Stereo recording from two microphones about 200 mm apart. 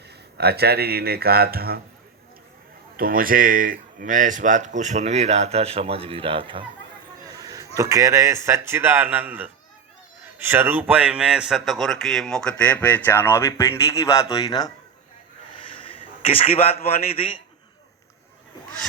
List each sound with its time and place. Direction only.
0.3 s speech: 55° right (ahead or behind)
3.0 s speech: 45° right (ahead or behind); by 6.7 s 25° right (ahead or behind)
7.3 s a sound: 15° right (ahead or behind)
7.8 s a man's voice: 15° right (ahead or behind); by 17.4 s 25° left (ahead or behind)